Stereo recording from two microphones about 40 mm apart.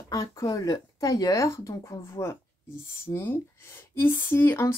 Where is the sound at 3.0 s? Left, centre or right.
Left.